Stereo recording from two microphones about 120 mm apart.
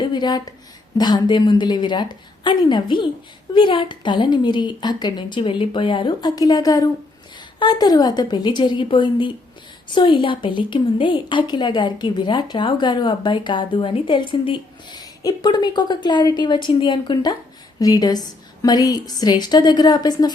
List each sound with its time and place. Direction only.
0.0 s a woman's voice: 35° left (ahead or behind)